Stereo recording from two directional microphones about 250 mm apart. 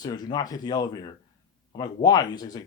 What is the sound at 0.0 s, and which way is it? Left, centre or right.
Speech, centre.